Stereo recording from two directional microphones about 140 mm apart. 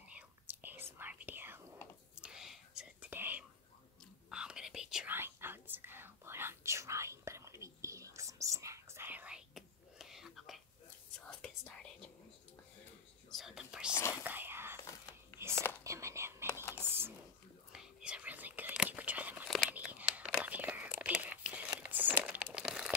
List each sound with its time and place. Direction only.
0.1 s whispering: 10° right (ahead or behind)
5.1 s whispering: 15° right (ahead or behind); by 12.1 s 5° left (ahead or behind)
13.3 s whispering: centre (ahead or behind)
15.8 s whispering: 20° right (ahead or behind)
16.8 s a sound: 15° right (ahead or behind)
17.7 s whispering: 5° right (ahead or behind)
21.6 s crumpling: 15° right (ahead or behind)